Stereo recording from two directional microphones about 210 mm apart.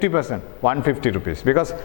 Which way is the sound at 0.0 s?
15° left (ahead or behind).